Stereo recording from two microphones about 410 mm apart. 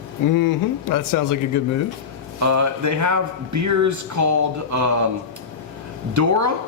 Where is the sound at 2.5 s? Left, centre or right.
Right.